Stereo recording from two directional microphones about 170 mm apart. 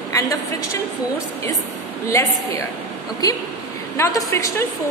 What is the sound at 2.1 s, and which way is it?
A woman's voice, 20° left (ahead or behind).